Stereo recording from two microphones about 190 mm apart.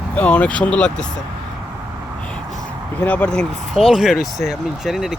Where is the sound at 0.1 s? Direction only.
5° left (ahead or behind).